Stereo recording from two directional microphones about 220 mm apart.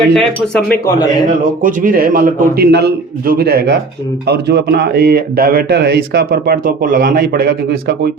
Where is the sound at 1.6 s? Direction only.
40° right (ahead or behind).